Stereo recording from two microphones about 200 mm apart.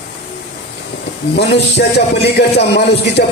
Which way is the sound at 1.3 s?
55° left (ahead or behind).